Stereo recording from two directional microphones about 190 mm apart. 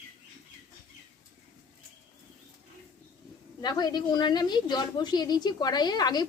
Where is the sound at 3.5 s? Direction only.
20° left (ahead or behind).